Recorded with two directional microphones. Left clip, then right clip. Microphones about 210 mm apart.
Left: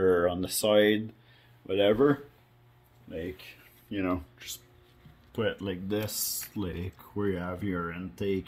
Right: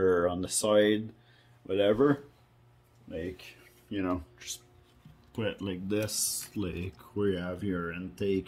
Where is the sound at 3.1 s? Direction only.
Centre (ahead or behind).